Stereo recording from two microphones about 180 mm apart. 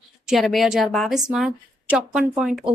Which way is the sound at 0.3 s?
Centre (ahead or behind).